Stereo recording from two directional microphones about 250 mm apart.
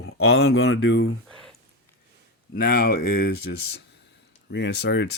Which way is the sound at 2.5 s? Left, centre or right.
Left.